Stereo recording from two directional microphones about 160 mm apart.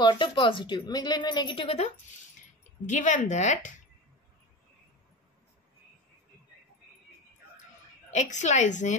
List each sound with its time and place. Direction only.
0.0 s a woman's voice: 30° left (ahead or behind)
2.9 s a woman's voice: 50° left (ahead or behind)
8.1 s a woman's voice: 45° left (ahead or behind)